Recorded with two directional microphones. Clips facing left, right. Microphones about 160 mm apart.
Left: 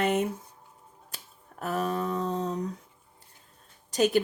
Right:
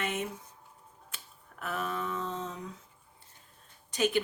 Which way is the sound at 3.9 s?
40° left (ahead or behind).